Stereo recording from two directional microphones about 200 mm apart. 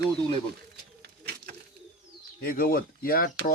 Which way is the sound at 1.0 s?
55° right (ahead or behind).